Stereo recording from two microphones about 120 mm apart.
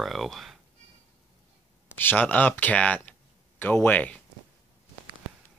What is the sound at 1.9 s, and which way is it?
Speech, 15° left (ahead or behind).